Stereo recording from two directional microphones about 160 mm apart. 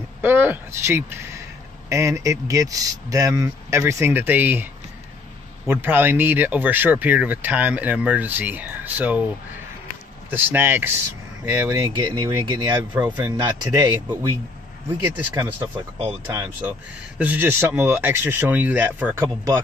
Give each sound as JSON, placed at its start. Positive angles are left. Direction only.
{"t": 0.2, "sound": "a man's voice", "side_deg": -15}
{"t": 5.7, "sound": "speech", "side_deg": -15}
{"t": 10.3, "sound": "a man's voice", "side_deg": -10}
{"t": 12.9, "sound": "a man's voice", "side_deg": -15}
{"t": 15.0, "sound": "speech", "side_deg": -10}